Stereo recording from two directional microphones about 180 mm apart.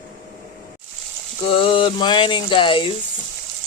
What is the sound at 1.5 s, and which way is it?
Speech, 30° left (ahead or behind).